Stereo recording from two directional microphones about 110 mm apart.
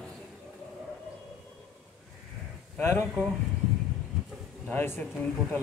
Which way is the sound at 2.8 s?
25° left (ahead or behind).